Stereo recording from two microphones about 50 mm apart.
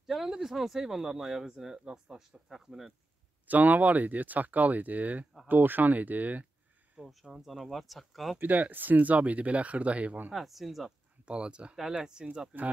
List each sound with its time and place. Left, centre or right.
0.0 s speech: centre
3.4 s speech: right
7.1 s speech: centre
8.4 s speech: right
10.3 s speech: centre
11.2 s speech: centre